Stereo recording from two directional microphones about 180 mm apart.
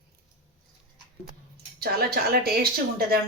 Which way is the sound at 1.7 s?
60° right (ahead or behind).